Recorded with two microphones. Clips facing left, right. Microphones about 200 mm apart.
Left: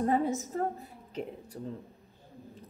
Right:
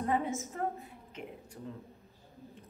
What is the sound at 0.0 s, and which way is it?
A woman's voice, 35° left (ahead or behind).